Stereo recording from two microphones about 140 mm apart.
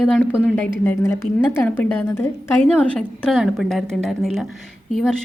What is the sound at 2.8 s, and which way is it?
A woman's voice, 5° left (ahead or behind).